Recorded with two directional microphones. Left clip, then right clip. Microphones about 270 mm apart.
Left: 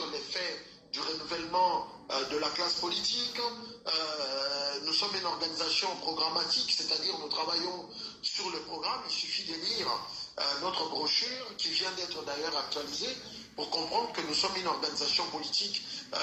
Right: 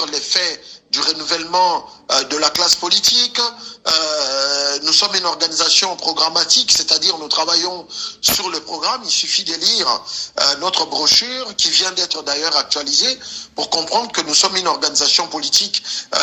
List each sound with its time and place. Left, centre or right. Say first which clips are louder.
0.1 s speech: right 17 dB; right
3.8 s speech: right 16 dB; right